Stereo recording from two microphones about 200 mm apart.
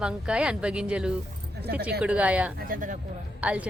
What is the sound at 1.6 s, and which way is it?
Speech, 50° right (ahead or behind).